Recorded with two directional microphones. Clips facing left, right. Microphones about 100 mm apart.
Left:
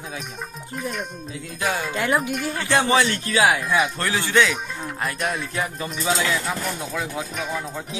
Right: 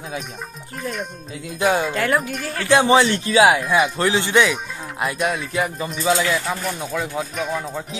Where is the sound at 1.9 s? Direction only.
20° left (ahead or behind).